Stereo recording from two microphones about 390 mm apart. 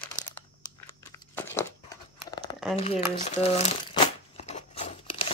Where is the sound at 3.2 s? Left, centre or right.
Centre.